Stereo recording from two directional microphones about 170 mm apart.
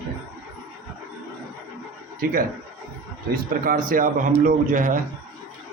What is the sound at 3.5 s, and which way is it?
A man's voice, 55° right (ahead or behind).